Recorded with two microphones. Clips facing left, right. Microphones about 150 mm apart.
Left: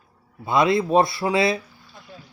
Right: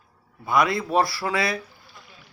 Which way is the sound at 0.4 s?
25° left (ahead or behind).